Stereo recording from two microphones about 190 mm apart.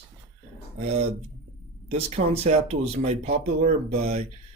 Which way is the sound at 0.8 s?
35° right (ahead or behind).